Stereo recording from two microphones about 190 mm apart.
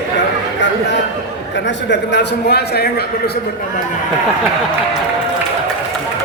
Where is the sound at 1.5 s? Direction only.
70° left (ahead or behind).